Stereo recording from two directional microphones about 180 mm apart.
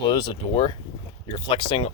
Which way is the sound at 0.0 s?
25° left (ahead or behind).